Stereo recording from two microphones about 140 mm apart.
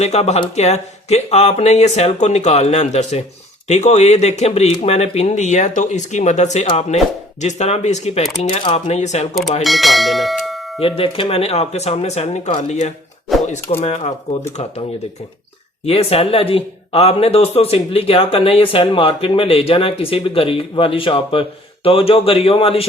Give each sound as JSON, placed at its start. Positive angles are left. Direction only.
{"t": 0.0, "sound": "speech", "side_deg": 50}
{"t": 9.3, "sound": "speech", "side_deg": 0}
{"t": 10.8, "sound": "speech", "side_deg": 40}
{"t": 13.3, "sound": "a sound", "side_deg": 0}
{"t": 13.8, "sound": "speech", "side_deg": 55}
{"t": 15.9, "sound": "speech", "side_deg": 45}